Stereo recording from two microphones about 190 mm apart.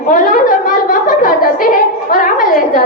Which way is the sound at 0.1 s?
45° left (ahead or behind).